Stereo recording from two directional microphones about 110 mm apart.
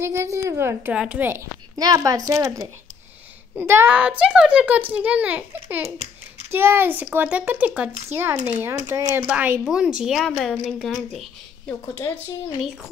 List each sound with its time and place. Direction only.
0.0 s a woman's voice: 25° right (ahead or behind)
0.9 s a child's voice: 10° right (ahead or behind)
1.8 s a woman's voice: 35° right (ahead or behind)
3.9 s a child's voice: 10° right (ahead or behind)
8.6 s a woman's voice: 25° right (ahead or behind)
9.3 s a child's voice: 15° right (ahead or behind); by 11.7 s 5° left (ahead or behind)